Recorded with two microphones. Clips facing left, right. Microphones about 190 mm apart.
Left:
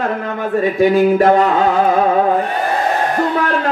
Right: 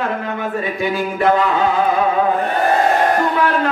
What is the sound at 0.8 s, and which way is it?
Speech, 45° left (ahead or behind).